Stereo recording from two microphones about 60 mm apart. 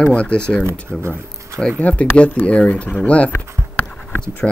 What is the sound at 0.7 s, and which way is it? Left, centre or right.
Speech, right.